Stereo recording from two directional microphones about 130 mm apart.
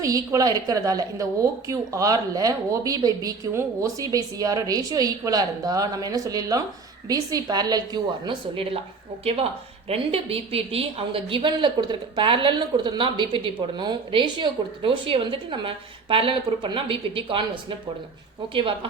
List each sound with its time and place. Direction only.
0.0 s a woman's voice: 25° right (ahead or behind); by 17.4 s 40° right (ahead or behind)
18.5 s a woman's voice: 40° right (ahead or behind)